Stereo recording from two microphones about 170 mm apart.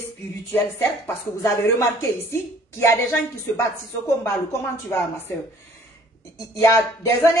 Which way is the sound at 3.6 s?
20° left (ahead or behind).